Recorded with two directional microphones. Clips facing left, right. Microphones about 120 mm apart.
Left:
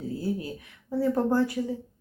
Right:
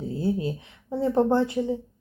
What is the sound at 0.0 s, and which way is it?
A woman's voice, 25° right (ahead or behind).